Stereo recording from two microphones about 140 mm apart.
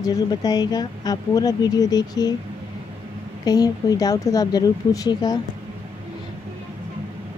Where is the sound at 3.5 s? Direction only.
25° left (ahead or behind).